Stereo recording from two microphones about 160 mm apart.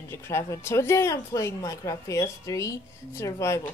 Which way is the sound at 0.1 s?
15° left (ahead or behind).